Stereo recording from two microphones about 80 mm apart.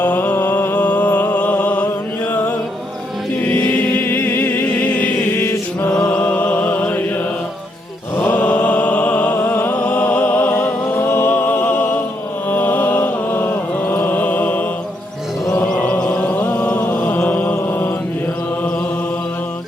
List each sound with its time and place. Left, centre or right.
0.0 s music: left
3.5 s music: left
5.3 s mantra: left
6.1 s a sound: centre
8.1 s mantra: left
15.8 s music: centre
16.9 s mantra: left